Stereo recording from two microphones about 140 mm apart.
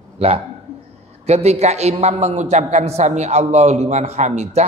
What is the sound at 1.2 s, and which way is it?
A man's voice, 50° right (ahead or behind).